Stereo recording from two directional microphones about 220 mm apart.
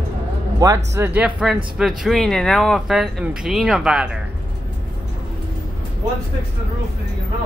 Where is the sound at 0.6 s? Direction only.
15° right (ahead or behind).